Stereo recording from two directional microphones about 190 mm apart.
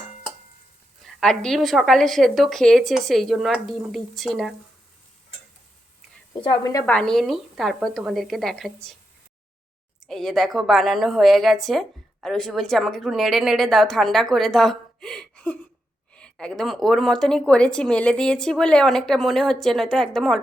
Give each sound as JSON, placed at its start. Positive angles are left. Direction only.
{"t": 1.0, "sound": "a woman's voice", "side_deg": 5}
{"t": 6.4, "sound": "a woman's voice", "side_deg": 20}
{"t": 6.8, "sound": "a woman's voice", "side_deg": 5}
{"t": 10.0, "sound": "a woman's voice", "side_deg": 0}